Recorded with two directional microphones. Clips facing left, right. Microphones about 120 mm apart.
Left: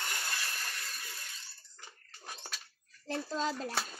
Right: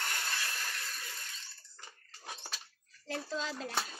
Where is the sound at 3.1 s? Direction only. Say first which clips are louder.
Left 3 dB; 40° left (ahead or behind).